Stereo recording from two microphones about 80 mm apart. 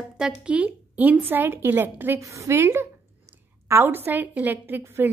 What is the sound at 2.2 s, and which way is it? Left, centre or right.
A woman's voice, right.